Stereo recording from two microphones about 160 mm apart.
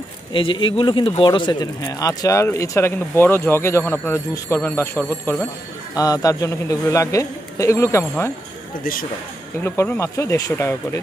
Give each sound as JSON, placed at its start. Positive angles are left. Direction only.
{"t": 0.3, "sound": "speech", "side_deg": 30}
{"t": 5.9, "sound": "speech", "side_deg": 20}
{"t": 9.6, "sound": "speech", "side_deg": 10}